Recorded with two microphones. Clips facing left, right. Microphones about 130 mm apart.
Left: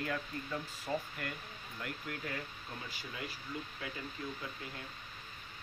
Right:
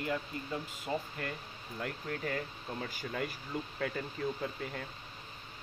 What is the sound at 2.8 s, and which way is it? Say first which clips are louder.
Speech: right 8 dB; 50° right (ahead or behind).